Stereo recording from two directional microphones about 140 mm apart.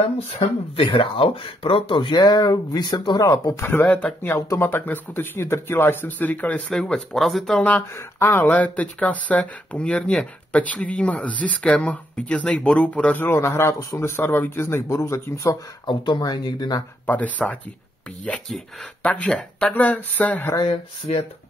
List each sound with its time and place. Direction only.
0.7 s speech: 35° left (ahead or behind); by 15.5 s 20° left (ahead or behind)
15.8 s speech: 35° left (ahead or behind)
17.0 s speech: 10° left (ahead or behind)